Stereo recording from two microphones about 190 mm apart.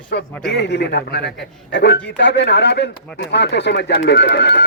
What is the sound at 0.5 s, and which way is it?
Speech, 65° left (ahead or behind).